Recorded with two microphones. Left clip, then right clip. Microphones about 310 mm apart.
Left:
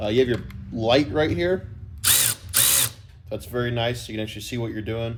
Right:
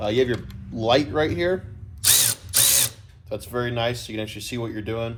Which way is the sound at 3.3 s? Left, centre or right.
Centre.